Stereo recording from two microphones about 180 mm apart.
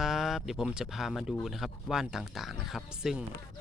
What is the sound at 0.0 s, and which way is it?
Speech, centre (ahead or behind).